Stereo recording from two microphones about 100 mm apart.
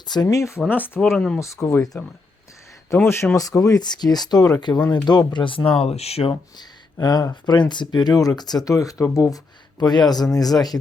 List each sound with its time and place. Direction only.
0.0 s speech: 45° left (ahead or behind)
0.7 s speech: 20° left (ahead or behind)
1.0 s speech: 5° left (ahead or behind)
1.4 s speech: 30° left (ahead or behind); by 5.7 s 60° left (ahead or behind)
5.8 s speech: 90° left
6.6 s speech: 45° left (ahead or behind)